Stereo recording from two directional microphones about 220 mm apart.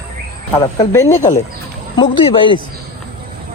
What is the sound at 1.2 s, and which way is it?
Speech, 35° left (ahead or behind).